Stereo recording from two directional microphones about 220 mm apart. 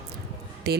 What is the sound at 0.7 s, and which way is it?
Speech, 45° right (ahead or behind).